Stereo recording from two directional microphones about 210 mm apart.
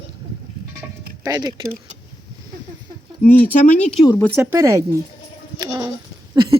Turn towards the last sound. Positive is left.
turn(degrees=-20)  # may be behind; listen again after turning